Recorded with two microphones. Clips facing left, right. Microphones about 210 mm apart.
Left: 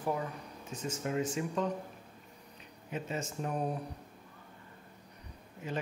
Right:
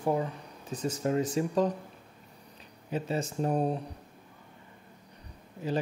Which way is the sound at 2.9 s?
35° right (ahead or behind).